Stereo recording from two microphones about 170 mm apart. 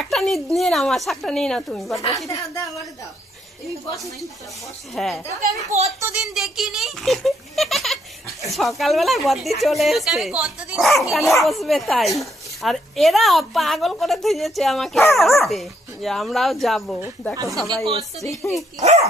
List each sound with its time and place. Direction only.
0.0 s speech: centre (ahead or behind)
2.0 s a woman's voice: 20° left (ahead or behind)
3.9 s speech: centre (ahead or behind)
5.7 s speech: 40° right (ahead or behind)
5.9 s speech: 10° right (ahead or behind)
17.8 s speech: 35° right (ahead or behind)
18.2 s a woman's voice: 20° left (ahead or behind)